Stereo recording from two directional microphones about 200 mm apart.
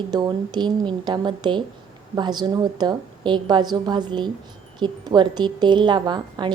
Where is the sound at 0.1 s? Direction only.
20° right (ahead or behind).